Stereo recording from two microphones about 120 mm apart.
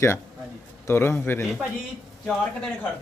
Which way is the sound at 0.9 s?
20° left (ahead or behind).